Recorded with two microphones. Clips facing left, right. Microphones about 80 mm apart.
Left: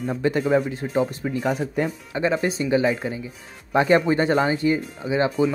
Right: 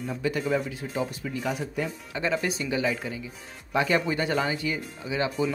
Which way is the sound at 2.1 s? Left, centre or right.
Left.